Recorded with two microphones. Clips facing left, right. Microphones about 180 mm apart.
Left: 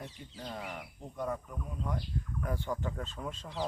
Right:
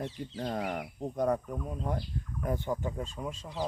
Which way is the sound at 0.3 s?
50° right (ahead or behind).